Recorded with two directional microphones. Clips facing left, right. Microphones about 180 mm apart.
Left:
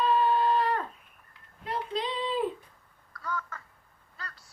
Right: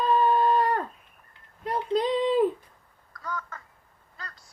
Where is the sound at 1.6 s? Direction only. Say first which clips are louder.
Right 7 dB; 45° right (ahead or behind).